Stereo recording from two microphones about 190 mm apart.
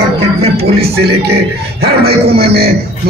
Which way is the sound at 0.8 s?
60° right (ahead or behind).